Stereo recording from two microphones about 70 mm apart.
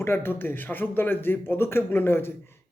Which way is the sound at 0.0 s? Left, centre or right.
Left.